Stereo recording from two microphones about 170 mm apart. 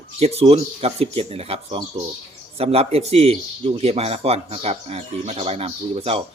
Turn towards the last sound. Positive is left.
turn(degrees=-35)  # may be behind; listen again after turning